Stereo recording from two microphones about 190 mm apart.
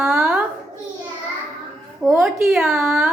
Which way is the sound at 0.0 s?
Centre (ahead or behind).